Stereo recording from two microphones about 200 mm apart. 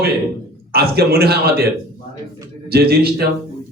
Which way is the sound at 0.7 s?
50° right (ahead or behind).